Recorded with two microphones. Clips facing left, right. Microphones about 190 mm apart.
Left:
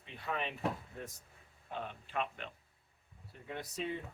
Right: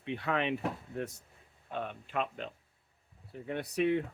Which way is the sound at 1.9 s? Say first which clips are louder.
Right 4 dB; 45° right (ahead or behind).